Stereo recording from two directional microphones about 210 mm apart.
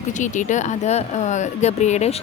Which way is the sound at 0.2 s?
35° left (ahead or behind).